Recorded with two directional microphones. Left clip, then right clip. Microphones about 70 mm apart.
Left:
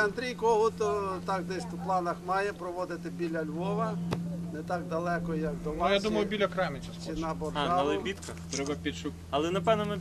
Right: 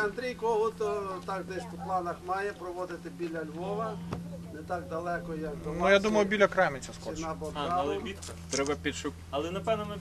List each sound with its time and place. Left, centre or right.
0.0 s speech: centre
5.8 s a man's voice: right
7.5 s speech: left
8.5 s speech: right
9.3 s a man's voice: left